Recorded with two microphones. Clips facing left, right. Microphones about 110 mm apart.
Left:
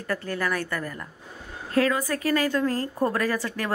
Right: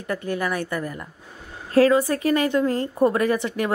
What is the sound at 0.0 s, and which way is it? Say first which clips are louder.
A woman's voice: right 3 dB; 15° right (ahead or behind).